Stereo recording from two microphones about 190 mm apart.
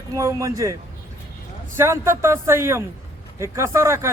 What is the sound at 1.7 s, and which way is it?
Speech, 15° right (ahead or behind).